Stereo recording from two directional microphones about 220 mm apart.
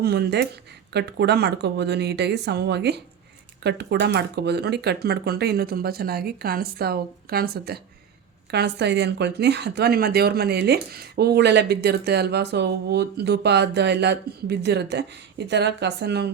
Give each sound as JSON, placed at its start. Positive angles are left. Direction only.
{"t": 0.0, "sound": "speech", "side_deg": -50}